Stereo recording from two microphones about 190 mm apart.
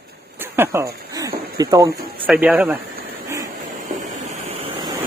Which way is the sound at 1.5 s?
20° right (ahead or behind).